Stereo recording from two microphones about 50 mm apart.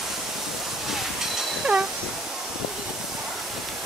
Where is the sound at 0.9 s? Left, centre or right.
Centre.